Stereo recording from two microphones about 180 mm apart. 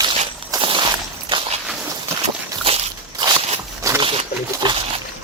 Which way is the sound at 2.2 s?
35° right (ahead or behind).